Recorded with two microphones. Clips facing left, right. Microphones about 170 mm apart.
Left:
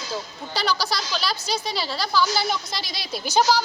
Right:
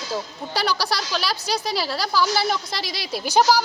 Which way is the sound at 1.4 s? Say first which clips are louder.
Right 2 dB; 35° right (ahead or behind).